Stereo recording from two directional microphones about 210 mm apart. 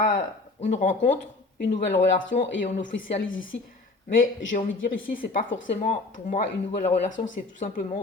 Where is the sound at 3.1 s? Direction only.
65° left (ahead or behind).